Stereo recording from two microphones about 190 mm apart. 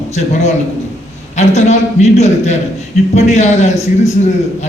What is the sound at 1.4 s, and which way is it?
A man's voice, 35° left (ahead or behind).